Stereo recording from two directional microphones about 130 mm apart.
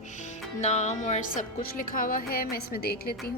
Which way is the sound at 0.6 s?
60° left (ahead or behind).